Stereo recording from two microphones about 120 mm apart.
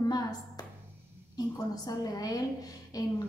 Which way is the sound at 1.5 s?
35° left (ahead or behind).